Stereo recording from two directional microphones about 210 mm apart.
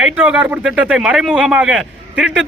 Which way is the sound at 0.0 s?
5° right (ahead or behind).